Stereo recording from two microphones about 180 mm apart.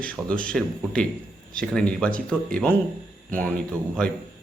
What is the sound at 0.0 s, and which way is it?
Speech, 5° left (ahead or behind).